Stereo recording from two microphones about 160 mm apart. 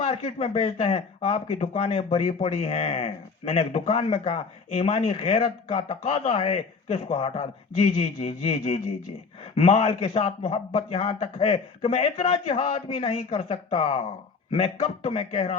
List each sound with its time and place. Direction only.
0.0 s speech: 40° left (ahead or behind)